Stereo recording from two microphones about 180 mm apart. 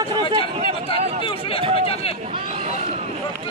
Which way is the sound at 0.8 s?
30° left (ahead or behind).